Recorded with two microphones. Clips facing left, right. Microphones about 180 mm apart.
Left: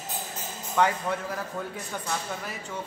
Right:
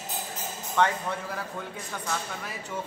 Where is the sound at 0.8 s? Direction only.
10° left (ahead or behind).